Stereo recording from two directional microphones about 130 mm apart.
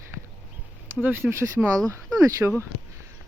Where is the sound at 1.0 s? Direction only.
15° right (ahead or behind).